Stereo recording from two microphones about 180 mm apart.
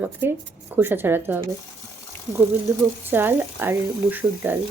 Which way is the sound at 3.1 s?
10° right (ahead or behind).